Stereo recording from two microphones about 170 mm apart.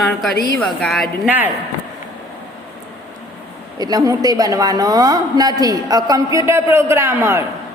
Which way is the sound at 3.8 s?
20° right (ahead or behind).